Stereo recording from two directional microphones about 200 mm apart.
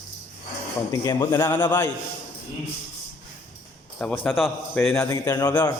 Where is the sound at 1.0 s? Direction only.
20° left (ahead or behind).